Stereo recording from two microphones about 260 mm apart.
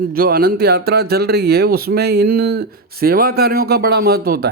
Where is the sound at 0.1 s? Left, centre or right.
Right.